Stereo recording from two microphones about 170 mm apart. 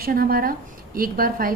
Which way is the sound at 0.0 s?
60° right (ahead or behind).